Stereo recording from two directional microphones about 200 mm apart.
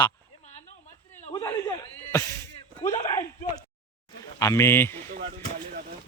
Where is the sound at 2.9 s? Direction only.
30° left (ahead or behind).